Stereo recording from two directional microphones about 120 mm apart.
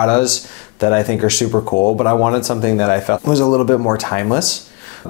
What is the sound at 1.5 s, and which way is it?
Speech, 25° left (ahead or behind).